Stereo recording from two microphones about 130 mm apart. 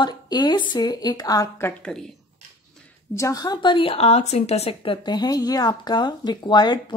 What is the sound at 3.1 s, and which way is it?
A woman's voice, 25° left (ahead or behind).